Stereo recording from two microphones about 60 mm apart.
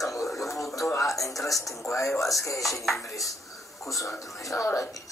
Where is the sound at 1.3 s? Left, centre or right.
Left.